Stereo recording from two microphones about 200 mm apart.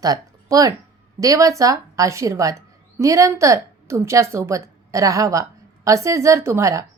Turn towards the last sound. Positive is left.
turn(degrees=-15)  # may be behind; listen again after turning